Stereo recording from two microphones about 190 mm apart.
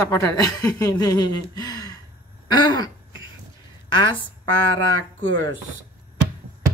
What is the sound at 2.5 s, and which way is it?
Throat clearing, 25° left (ahead or behind).